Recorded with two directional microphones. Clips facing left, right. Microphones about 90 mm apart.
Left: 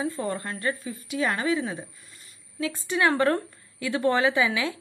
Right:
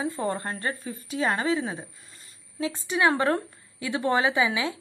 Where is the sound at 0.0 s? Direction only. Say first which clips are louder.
Right 1 dB; 25° right (ahead or behind).